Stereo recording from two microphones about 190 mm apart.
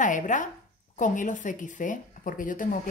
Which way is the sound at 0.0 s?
40° left (ahead or behind).